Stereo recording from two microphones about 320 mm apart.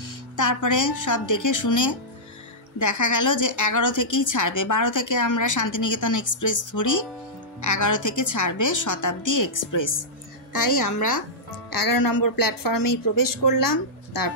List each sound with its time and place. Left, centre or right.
0.0 s a woman's voice: left
11.7 s speech: left